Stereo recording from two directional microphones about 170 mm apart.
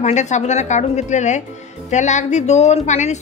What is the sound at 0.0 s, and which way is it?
A woman's voice, 45° left (ahead or behind).